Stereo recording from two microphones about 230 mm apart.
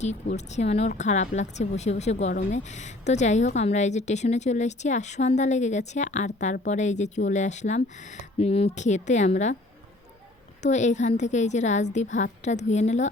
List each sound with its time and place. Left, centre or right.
0.0 s speech: left
10.6 s speech: left